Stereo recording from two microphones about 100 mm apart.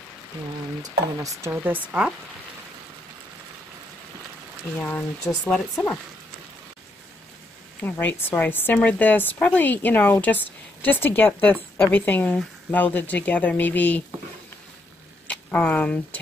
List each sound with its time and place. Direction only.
0.8 s speech: 35° right (ahead or behind)
1.5 s speech: 15° right (ahead or behind)
4.7 s a woman's voice: 15° left (ahead or behind)
7.8 s a woman's voice: 20° left (ahead or behind)
15.2 s speech: 10° left (ahead or behind)